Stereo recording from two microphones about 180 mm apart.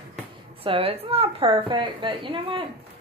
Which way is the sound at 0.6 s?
30° right (ahead or behind).